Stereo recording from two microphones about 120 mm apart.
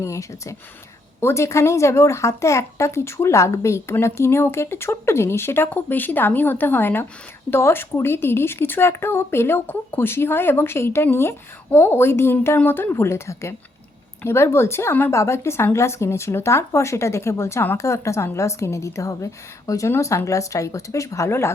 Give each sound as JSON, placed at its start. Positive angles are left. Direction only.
{"t": 0.0, "sound": "speech", "side_deg": 25}